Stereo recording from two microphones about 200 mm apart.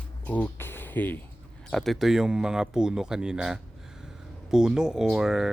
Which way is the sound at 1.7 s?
Centre (ahead or behind).